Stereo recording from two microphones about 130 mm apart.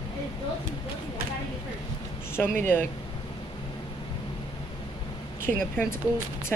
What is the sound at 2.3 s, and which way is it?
Speech, 15° left (ahead or behind).